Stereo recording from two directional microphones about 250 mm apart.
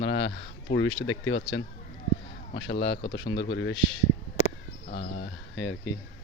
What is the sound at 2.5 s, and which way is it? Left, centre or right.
Speech, left.